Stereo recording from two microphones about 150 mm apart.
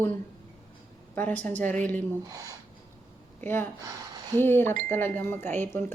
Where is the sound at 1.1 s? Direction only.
15° left (ahead or behind).